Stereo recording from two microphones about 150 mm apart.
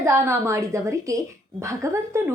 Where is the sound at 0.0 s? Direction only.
20° right (ahead or behind).